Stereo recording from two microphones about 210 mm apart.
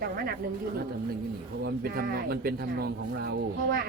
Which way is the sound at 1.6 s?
45° right (ahead or behind).